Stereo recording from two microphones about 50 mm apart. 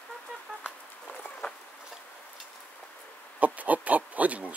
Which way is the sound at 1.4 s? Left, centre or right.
Left.